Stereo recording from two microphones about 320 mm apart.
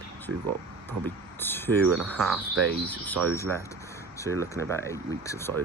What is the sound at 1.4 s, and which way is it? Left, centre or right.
Cricket, centre.